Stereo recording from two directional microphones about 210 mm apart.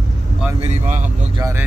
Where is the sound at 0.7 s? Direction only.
35° right (ahead or behind).